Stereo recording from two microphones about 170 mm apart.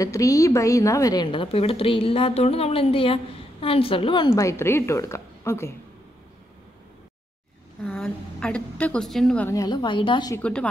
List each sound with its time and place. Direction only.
0.0 s a woman's voice: 20° left (ahead or behind)
4.3 s a woman's voice: 15° left (ahead or behind)
7.8 s a woman's voice: 5° left (ahead or behind)
9.5 s a woman's voice: 20° left (ahead or behind)
10.3 s a woman's voice: 5° left (ahead or behind)